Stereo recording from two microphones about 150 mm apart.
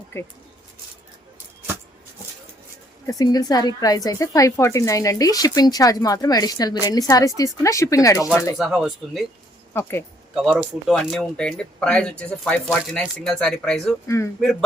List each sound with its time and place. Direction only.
0.1 s speech: 15° left (ahead or behind)
3.1 s speech: 25° left (ahead or behind)
8.5 s speech: centre (ahead or behind)
9.7 s speech: 15° left (ahead or behind)
10.3 s speech: centre (ahead or behind)